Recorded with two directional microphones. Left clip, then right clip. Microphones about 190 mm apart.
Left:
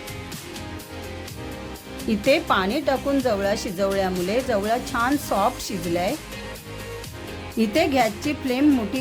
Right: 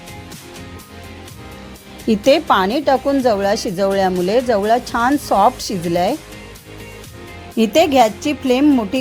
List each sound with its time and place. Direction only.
2.0 s a woman's voice: 35° right (ahead or behind)
7.6 s a woman's voice: 40° right (ahead or behind)